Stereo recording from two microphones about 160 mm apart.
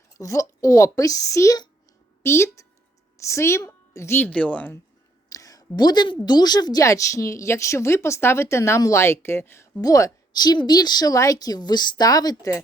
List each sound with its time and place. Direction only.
0.2 s speech: 20° left (ahead or behind)
5.3 s a sound: 20° left (ahead or behind)
6.2 s speech: 25° left (ahead or behind)